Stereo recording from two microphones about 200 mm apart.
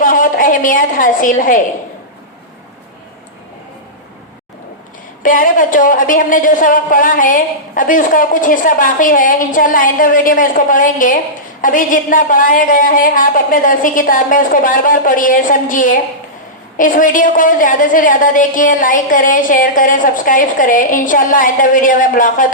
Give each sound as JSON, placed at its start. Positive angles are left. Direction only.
{"t": 0.0, "sound": "a woman's voice", "side_deg": 45}
{"t": 5.2, "sound": "a woman's voice", "side_deg": 40}